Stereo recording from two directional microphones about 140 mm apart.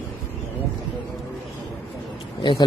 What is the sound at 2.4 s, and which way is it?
Speech, 35° left (ahead or behind).